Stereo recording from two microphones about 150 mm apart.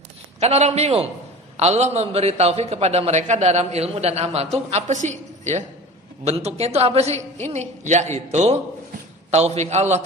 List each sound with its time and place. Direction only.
0.3 s a man's voice: 45° right (ahead or behind)